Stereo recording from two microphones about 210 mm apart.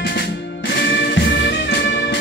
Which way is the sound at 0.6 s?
55° left (ahead or behind).